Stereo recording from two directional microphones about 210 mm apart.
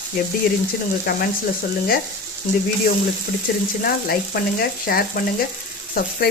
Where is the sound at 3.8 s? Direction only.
45° left (ahead or behind).